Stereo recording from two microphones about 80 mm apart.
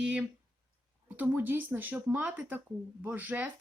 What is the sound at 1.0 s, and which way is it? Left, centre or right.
Speech, right.